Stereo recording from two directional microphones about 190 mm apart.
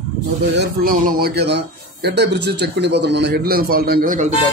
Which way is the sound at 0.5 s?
50° right (ahead or behind).